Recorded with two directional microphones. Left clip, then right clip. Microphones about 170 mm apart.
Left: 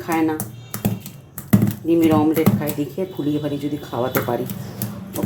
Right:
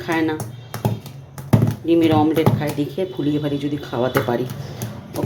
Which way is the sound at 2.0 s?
Centre (ahead or behind).